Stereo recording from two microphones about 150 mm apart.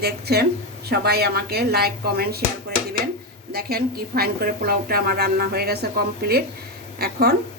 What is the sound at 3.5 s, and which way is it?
A woman's voice, 90° right.